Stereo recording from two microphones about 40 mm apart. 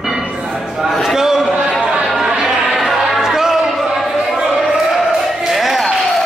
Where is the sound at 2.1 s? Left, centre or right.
Centre.